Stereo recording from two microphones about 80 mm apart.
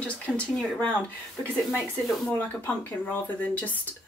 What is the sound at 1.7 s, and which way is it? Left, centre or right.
Speech, centre.